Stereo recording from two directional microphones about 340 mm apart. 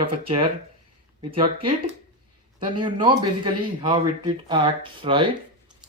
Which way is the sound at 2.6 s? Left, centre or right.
Centre.